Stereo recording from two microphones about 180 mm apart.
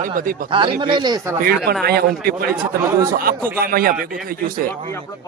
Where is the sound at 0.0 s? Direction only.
50° right (ahead or behind).